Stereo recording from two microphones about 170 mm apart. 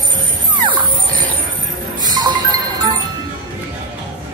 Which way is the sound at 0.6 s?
25° right (ahead or behind).